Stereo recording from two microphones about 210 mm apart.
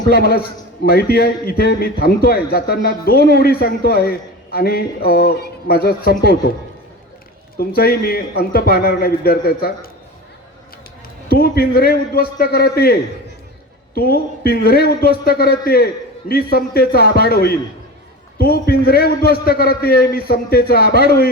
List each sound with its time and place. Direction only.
0.1 s a man's voice: 45° left (ahead or behind)
7.8 s a man's voice: 45° left (ahead or behind)
11.3 s a man's voice: 45° left (ahead or behind)